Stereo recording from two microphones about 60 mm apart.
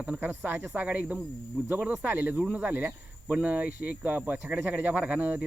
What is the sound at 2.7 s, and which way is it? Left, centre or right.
Speech, right.